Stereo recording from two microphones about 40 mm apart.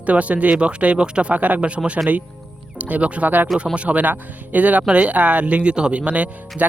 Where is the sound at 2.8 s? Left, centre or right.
Right.